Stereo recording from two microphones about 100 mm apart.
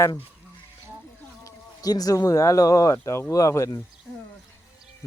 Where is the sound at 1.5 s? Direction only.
40° left (ahead or behind).